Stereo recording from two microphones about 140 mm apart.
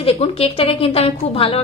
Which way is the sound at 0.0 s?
45° left (ahead or behind).